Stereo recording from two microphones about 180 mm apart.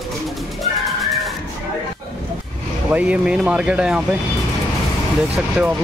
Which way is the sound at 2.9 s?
5° right (ahead or behind).